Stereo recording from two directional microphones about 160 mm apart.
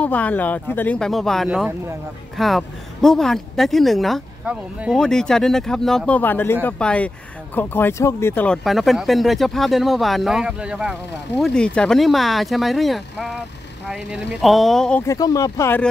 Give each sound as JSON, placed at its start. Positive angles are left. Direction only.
{"t": 0.0, "sound": "speech", "side_deg": 10}
{"t": 4.9, "sound": "speech", "side_deg": 5}
{"t": 8.6, "sound": "speech", "side_deg": 0}
{"t": 15.0, "sound": "speech", "side_deg": 20}